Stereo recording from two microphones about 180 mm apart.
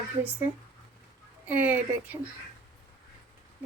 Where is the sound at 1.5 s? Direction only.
10° right (ahead or behind).